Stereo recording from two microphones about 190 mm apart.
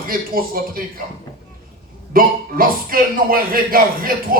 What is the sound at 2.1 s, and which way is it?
A man's voice, 50° right (ahead or behind).